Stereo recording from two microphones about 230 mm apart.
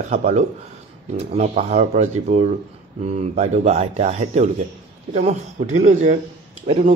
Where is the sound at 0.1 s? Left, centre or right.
Right.